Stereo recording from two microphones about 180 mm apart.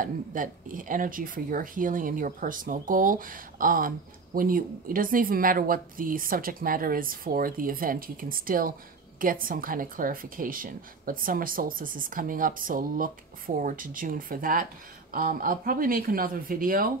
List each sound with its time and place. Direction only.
0.0 s speech: 50° right (ahead or behind)